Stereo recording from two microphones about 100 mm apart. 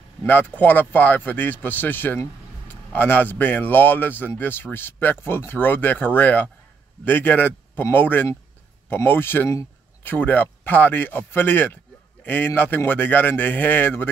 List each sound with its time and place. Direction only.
0.2 s speech: 20° left (ahead or behind)